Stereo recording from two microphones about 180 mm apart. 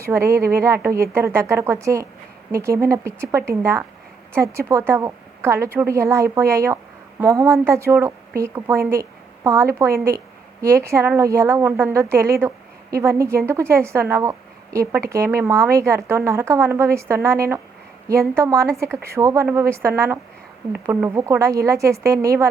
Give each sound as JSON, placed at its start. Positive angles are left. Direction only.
{"t": 0.0, "sound": "a woman's voice", "side_deg": -15}